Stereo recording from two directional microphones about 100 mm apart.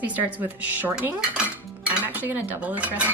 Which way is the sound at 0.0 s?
15° right (ahead or behind).